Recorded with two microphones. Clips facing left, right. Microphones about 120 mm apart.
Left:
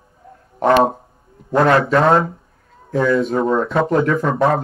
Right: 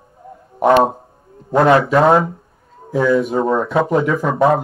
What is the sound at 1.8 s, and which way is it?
A man's voice, centre (ahead or behind).